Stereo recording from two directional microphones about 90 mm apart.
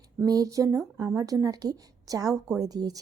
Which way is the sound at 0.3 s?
40° right (ahead or behind).